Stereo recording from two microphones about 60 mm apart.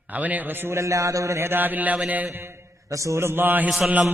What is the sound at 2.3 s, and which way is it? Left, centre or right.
A man's voice, right.